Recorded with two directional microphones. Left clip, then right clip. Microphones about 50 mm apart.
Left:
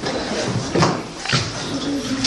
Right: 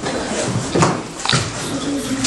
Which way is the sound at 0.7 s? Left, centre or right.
Centre.